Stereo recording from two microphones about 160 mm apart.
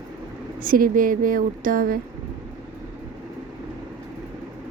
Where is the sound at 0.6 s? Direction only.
60° right (ahead or behind).